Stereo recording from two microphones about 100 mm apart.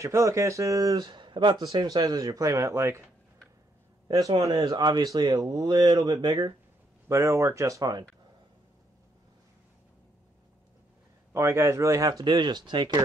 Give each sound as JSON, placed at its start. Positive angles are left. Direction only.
{"t": 0.0, "sound": "speech", "side_deg": -30}
{"t": 1.0, "sound": "speech", "side_deg": -50}
{"t": 4.4, "sound": "speech", "side_deg": -35}
{"t": 4.6, "sound": "speech", "side_deg": -45}
{"t": 7.1, "sound": "speech", "side_deg": -30}
{"t": 11.3, "sound": "speech", "side_deg": -25}